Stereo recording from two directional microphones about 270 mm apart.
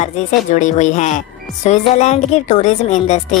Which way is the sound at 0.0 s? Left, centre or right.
Left.